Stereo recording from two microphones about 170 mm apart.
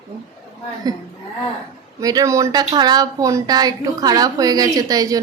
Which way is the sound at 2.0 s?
20° right (ahead or behind).